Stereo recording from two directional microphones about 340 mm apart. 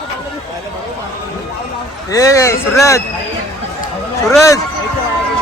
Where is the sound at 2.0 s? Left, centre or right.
Centre.